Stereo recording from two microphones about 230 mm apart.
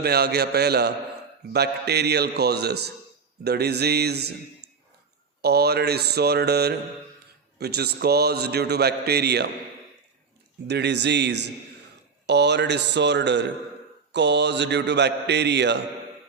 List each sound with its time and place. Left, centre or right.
0.0 s a man's voice: right
5.4 s a man's voice: right
10.7 s a man's voice: right